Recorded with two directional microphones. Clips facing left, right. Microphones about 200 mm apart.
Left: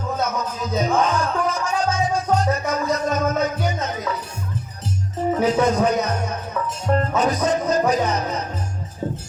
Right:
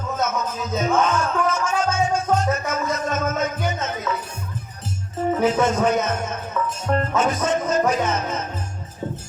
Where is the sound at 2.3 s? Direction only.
35° left (ahead or behind).